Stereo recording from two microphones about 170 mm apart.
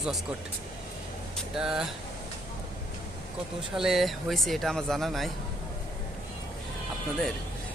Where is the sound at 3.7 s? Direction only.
Centre (ahead or behind).